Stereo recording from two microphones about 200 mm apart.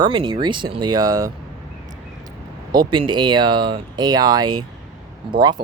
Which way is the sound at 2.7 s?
20° right (ahead or behind).